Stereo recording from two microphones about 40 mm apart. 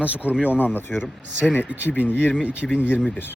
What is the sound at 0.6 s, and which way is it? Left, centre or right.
A man's voice, left.